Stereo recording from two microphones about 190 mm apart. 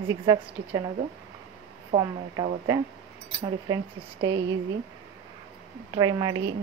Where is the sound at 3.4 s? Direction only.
20° right (ahead or behind).